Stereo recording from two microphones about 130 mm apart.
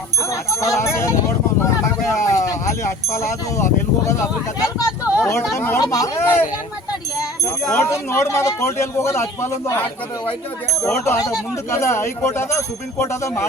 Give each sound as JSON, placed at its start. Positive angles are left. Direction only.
{"t": 0.3, "sound": "speech", "side_deg": 25}
{"t": 2.2, "sound": "speech", "side_deg": 25}
{"t": 7.4, "sound": "speech", "side_deg": 20}
{"t": 10.8, "sound": "speech", "side_deg": 20}